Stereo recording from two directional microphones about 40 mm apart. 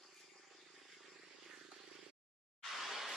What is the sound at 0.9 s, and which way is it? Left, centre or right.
Vehicle, centre.